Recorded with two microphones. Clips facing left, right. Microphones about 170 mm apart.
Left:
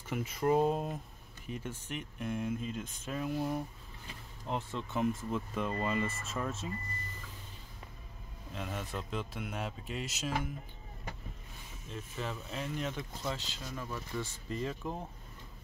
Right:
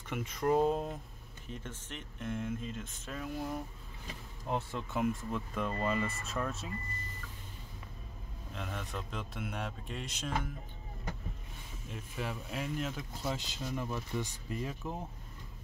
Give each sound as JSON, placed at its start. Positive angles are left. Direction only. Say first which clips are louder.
{"t": 0.1, "sound": "speech", "louder": "left 1 dB", "side_deg": 5}
{"t": 4.5, "sound": "speech", "louder": "right 1 dB", "side_deg": -5}
{"t": 8.5, "sound": "speech", "louder": "left 2 dB", "side_deg": 5}
{"t": 11.9, "sound": "speech", "louder": "even", "side_deg": -10}